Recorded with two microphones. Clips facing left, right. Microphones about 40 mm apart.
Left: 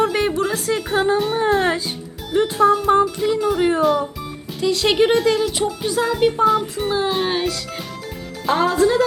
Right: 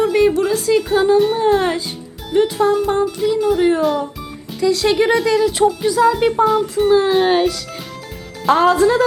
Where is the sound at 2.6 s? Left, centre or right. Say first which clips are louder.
Left 3 dB; centre.